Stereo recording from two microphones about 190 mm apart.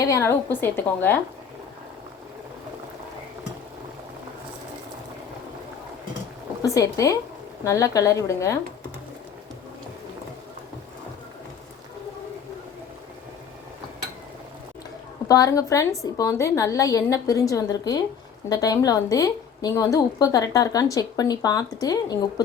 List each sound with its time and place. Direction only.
0.0 s a woman's voice: 15° left (ahead or behind)
6.6 s a woman's voice: 15° left (ahead or behind)
15.3 s a woman's voice: 20° left (ahead or behind)